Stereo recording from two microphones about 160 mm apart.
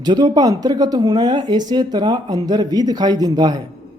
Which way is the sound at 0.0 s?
25° right (ahead or behind).